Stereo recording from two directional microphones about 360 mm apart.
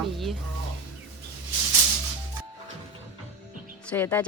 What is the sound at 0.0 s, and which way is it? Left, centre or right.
Stir, centre.